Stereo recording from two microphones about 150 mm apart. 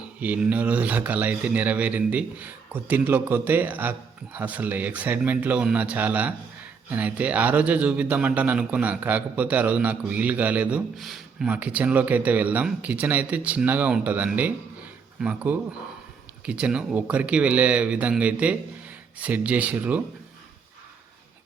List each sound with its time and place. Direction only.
0.2 s a man's voice: 10° right (ahead or behind)